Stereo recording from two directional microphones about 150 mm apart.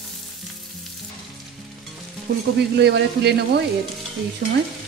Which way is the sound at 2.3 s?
90° right.